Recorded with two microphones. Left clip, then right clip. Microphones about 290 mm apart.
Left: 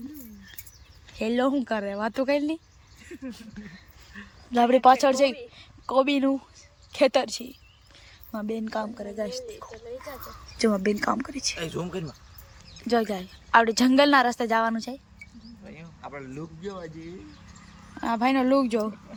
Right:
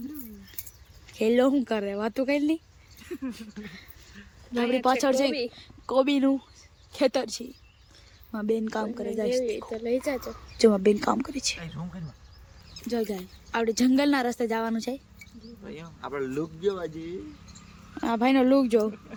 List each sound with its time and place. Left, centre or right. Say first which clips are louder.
1.2 s a woman's voice: right 3 dB; centre
4.5 s a woman's voice: left 7 dB; centre
10.6 s a woman's voice: right 4 dB; centre
11.6 s speech: left 10 dB; left
12.9 s a woman's voice: left 5 dB; centre